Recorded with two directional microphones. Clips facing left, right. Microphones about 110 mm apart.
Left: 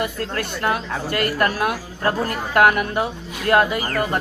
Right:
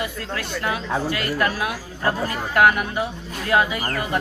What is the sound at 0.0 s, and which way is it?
Speech, 50° left (ahead or behind).